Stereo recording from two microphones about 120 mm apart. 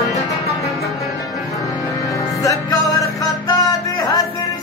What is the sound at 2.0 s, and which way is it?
Music, 25° left (ahead or behind).